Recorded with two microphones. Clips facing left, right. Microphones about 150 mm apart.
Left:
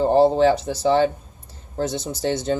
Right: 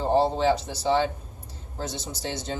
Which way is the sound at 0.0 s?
60° left (ahead or behind).